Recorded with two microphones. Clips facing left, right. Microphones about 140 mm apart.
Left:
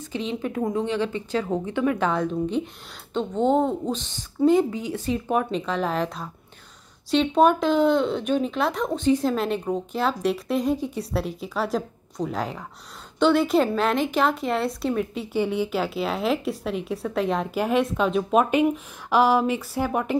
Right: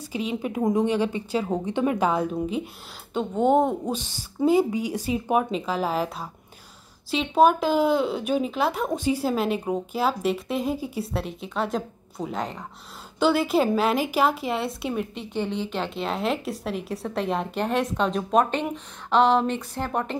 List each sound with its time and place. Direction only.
0.0 s a woman's voice: 10° right (ahead or behind)
1.7 s a woman's voice: 20° right (ahead or behind)
2.0 s a woman's voice: 10° right (ahead or behind)
15.3 s speech: 10° left (ahead or behind)